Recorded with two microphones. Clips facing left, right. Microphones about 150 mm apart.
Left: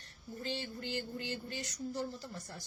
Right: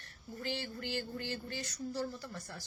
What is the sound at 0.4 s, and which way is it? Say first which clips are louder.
A woman's voice: right 1 dB; 20° left (ahead or behind).